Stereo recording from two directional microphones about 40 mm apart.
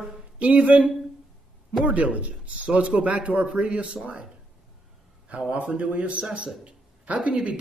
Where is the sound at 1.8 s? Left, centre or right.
Right.